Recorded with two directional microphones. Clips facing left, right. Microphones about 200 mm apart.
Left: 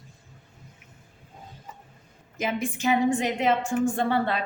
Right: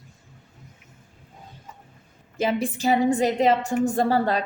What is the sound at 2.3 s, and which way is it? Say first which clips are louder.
A woman's voice: right 4 dB; 35° right (ahead or behind).